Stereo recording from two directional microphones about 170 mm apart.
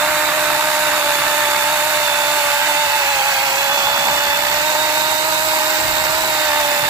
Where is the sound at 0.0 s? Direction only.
10° right (ahead or behind).